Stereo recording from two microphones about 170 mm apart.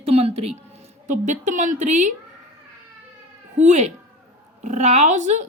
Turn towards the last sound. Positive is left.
turn(degrees=-45)  # may be behind; listen again after turning